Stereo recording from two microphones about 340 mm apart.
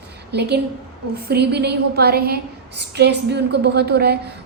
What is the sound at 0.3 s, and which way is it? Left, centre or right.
A woman's voice, right.